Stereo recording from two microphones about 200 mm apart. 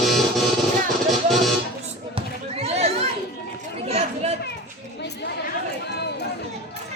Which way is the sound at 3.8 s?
30° right (ahead or behind).